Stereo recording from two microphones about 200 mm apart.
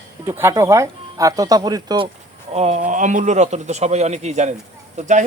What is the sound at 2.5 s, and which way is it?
Speech, 35° right (ahead or behind).